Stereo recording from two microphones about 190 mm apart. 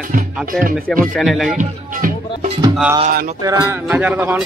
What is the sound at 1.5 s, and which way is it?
Speech, 45° right (ahead or behind).